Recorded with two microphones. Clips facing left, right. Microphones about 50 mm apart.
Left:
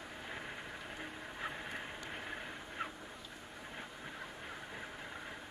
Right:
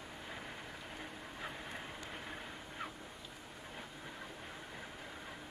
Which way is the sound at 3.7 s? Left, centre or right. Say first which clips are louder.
Left 2 dB; centre.